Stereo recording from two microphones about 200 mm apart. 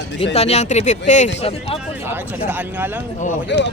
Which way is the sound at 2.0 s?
10° right (ahead or behind).